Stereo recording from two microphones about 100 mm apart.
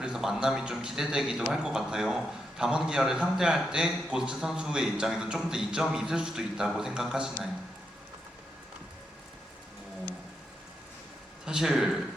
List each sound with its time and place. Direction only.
0.0 s music: 5° right (ahead or behind)
0.4 s a man's voice: 5° right (ahead or behind)
11.4 s speech: 5° right (ahead or behind)